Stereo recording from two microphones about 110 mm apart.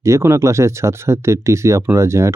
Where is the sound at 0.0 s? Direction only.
25° right (ahead or behind).